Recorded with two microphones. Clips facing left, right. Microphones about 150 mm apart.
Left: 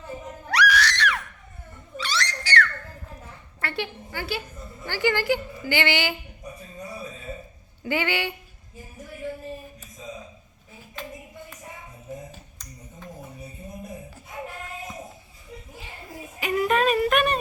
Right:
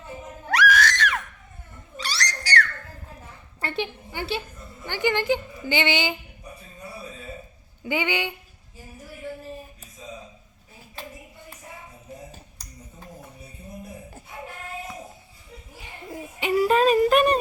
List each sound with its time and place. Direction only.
0.4 s screaming: 45° right (ahead or behind)
2.0 s a sound: 40° right (ahead or behind)
3.6 s a woman's voice: 20° right (ahead or behind)
7.9 s speech: 15° right (ahead or behind)
12.3 s a sound: 35° right (ahead or behind)
16.4 s yodeling: 30° right (ahead or behind)